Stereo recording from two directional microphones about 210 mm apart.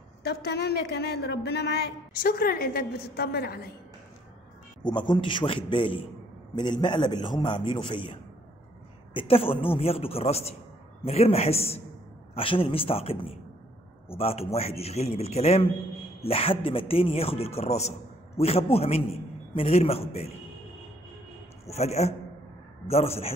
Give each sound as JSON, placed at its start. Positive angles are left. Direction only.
{"t": 0.2, "sound": "a woman's voice", "side_deg": 50}
{"t": 4.8, "sound": "a man's voice", "side_deg": 20}
{"t": 21.6, "sound": "a man's voice", "side_deg": 30}